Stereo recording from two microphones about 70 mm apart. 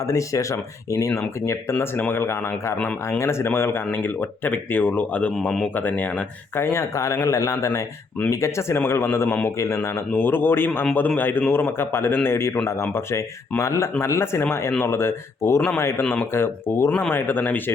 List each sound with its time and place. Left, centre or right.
0.1 s speech: left
2.0 s a man's voice: left
5.3 s speech: centre
5.7 s speech: left
6.6 s speech: left
8.8 s a man's voice: left
10.1 s a man's voice: left